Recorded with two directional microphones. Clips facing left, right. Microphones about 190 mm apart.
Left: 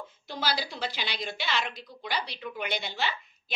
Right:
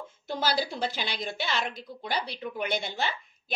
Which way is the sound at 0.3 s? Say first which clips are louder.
Right 4 dB; 50° right (ahead or behind).